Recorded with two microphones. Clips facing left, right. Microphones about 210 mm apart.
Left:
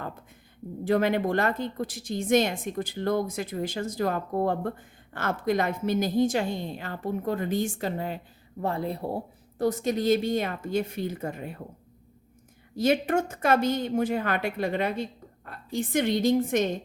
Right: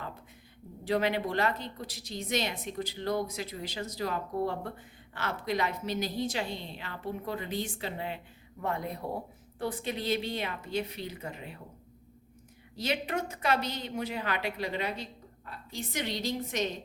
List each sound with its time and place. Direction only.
0.9 s speech: 50° left (ahead or behind)
8.6 s speech: 30° left (ahead or behind); by 11.6 s 50° left (ahead or behind)
12.7 s speech: 50° left (ahead or behind)